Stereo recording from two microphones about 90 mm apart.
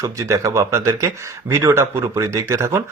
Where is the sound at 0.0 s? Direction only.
35° right (ahead or behind).